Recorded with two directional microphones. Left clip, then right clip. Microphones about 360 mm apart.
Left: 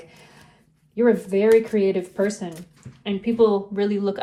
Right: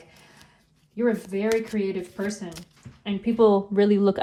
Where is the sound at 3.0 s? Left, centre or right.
Centre.